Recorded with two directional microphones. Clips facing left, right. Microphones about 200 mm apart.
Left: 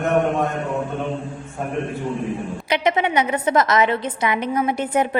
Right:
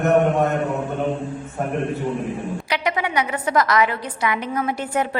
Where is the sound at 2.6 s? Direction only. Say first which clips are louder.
Left 5 dB; 20° left (ahead or behind).